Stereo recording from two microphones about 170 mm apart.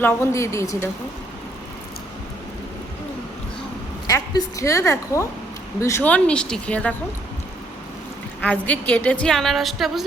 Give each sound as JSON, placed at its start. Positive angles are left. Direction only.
{"t": 0.0, "sound": "speech", "side_deg": 15}
{"t": 4.0, "sound": "a woman's voice", "side_deg": 20}
{"t": 8.4, "sound": "speech", "side_deg": 10}